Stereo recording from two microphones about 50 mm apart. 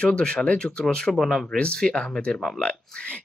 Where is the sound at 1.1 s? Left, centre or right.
Centre.